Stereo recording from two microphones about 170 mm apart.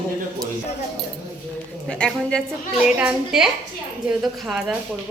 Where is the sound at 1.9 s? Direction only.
5° left (ahead or behind).